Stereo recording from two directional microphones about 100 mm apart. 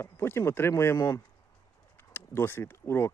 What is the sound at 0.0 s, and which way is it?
Speech, 25° left (ahead or behind).